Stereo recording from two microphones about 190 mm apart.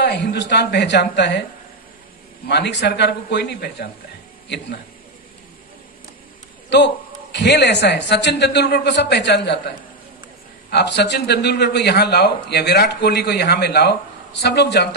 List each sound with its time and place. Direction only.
0.0 s a man's voice: 60° left (ahead or behind)
2.4 s a man's voice: 65° left (ahead or behind)
7.3 s a man's voice: 65° left (ahead or behind)